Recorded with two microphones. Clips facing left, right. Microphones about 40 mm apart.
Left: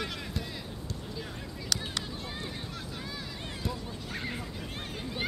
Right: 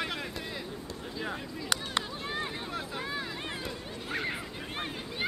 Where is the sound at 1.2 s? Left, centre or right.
Right.